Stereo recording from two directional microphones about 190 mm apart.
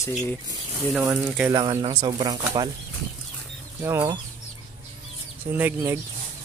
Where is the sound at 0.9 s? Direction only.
5° right (ahead or behind).